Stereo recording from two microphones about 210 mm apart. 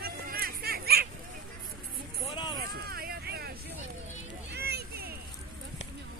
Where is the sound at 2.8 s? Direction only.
45° right (ahead or behind).